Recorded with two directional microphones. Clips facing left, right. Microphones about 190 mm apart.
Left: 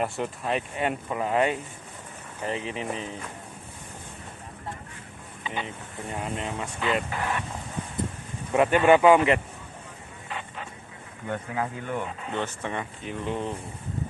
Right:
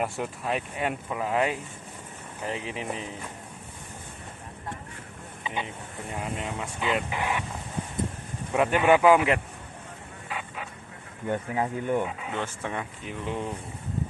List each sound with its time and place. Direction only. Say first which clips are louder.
0.0 s speech: left 1 dB; 5° right (ahead or behind)
5.4 s a sound: even; 20° right (ahead or behind)
6.3 s speech: left 1 dB; 5° right (ahead or behind)
8.5 s speech: left 2 dB; centre (ahead or behind)
10.3 s vehicle: right 1 dB; 5° right (ahead or behind)
11.2 s speech: right 2 dB; 20° right (ahead or behind)
12.0 s speech: even; 5° right (ahead or behind)